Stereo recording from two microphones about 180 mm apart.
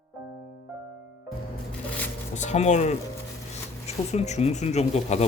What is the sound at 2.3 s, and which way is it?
Speech, 40° left (ahead or behind).